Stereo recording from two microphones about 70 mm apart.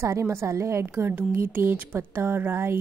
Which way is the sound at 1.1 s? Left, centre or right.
Right.